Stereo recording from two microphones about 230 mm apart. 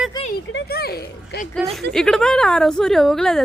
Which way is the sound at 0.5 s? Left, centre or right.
Left.